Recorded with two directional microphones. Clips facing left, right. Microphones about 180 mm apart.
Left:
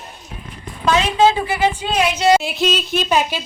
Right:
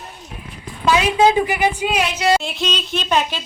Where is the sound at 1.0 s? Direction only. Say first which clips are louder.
Right 1 dB; 15° right (ahead or behind).